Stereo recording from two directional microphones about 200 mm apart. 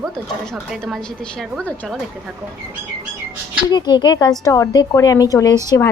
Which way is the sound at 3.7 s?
20° left (ahead or behind).